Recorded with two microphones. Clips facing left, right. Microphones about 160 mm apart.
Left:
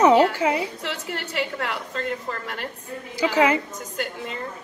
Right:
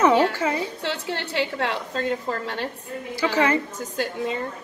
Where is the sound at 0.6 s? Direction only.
30° right (ahead or behind).